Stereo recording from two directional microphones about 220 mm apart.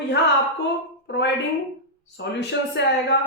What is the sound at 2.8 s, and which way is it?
Speech, 50° left (ahead or behind).